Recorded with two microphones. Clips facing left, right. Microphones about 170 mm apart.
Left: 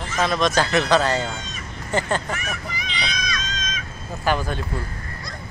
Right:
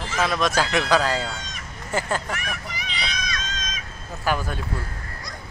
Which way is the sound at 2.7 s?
60° right (ahead or behind).